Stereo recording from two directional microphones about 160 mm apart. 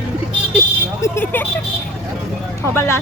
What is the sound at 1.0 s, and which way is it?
Speech, 15° left (ahead or behind).